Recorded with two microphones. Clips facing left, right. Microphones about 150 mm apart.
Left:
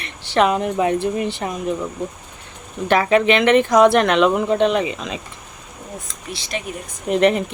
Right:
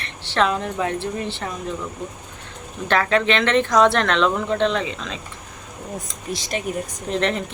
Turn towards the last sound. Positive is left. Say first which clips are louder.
# left 6 dB
turn(degrees=10)  # may be behind; listen again after turning